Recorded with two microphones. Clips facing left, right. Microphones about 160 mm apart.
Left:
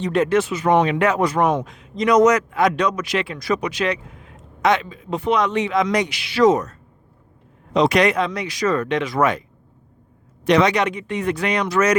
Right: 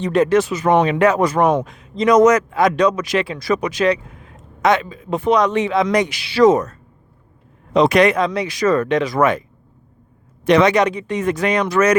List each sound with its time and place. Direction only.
0.0 s a man's voice: 40° right (ahead or behind)
2.5 s a man's voice: 40° right (ahead or behind)
10.4 s a man's voice: 55° right (ahead or behind)
10.8 s a man's voice: 35° right (ahead or behind); by 11.9 s 55° right (ahead or behind)